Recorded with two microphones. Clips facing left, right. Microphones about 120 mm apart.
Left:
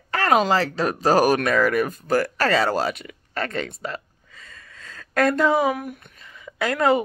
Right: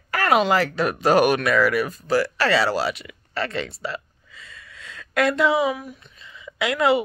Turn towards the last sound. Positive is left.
turn(degrees=45)  # may be behind; listen again after turning